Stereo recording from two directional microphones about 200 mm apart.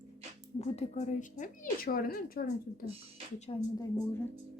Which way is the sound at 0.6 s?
35° left (ahead or behind).